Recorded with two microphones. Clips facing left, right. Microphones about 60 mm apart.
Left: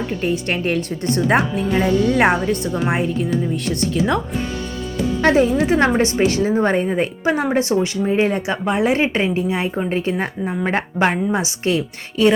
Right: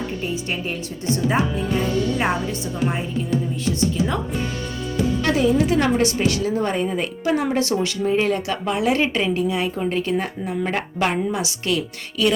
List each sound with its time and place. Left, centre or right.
0.2 s speech: left
5.2 s speech: left